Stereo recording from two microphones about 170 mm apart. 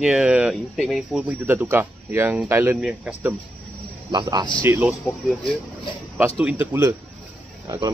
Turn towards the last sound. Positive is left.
turn(degrees=-20)  # may be behind; listen again after turning